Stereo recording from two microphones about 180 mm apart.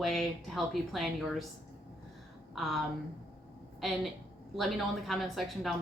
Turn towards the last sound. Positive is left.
turn(degrees=0)  # may be behind; listen again after turning